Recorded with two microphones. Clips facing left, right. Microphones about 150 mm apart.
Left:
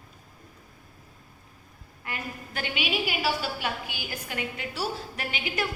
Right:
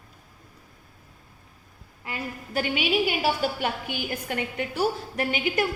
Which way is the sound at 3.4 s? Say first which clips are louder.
Right 5 dB; 50° right (ahead or behind).